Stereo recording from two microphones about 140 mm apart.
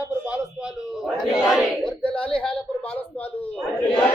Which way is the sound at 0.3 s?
5° right (ahead or behind).